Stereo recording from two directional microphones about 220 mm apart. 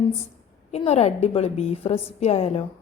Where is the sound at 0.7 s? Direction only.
30° left (ahead or behind).